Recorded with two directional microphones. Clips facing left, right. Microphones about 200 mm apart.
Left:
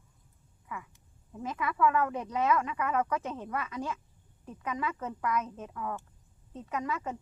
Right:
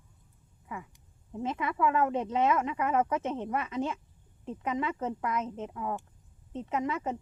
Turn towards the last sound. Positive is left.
turn(degrees=-25)  # may be behind; listen again after turning